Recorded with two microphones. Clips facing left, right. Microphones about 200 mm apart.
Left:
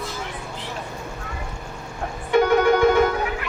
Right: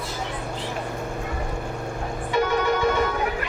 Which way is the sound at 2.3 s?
60° left (ahead or behind).